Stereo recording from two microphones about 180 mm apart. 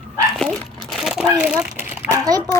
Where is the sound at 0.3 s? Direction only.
Centre (ahead or behind); by 2.4 s 20° right (ahead or behind).